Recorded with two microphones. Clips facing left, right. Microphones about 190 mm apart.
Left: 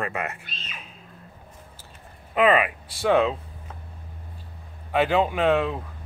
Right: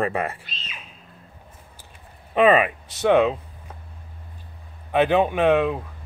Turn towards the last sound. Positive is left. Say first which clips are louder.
# right 3 dB
turn(degrees=-20)  # may be behind; listen again after turning